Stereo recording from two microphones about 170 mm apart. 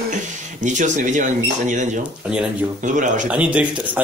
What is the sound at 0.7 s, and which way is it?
Speech, 45° right (ahead or behind).